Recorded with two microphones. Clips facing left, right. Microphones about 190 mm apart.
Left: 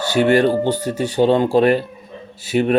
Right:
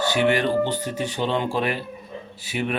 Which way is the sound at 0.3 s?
40° left (ahead or behind).